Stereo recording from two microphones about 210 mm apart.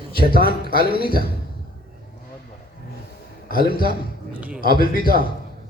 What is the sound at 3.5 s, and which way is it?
Speech, 45° left (ahead or behind).